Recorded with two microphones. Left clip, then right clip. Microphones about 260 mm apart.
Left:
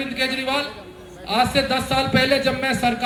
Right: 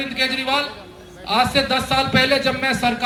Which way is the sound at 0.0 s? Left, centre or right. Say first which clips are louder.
Right 2 dB; centre.